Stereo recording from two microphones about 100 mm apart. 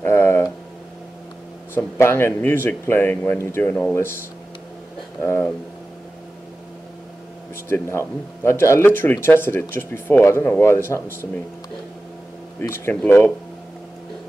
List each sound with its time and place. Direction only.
0.0 s a sound: 25° left (ahead or behind)
2.0 s speech: 25° left (ahead or behind)
5.2 s speech: 25° left (ahead or behind)
7.7 s speech: 25° left (ahead or behind)
12.5 s speech: 25° left (ahead or behind)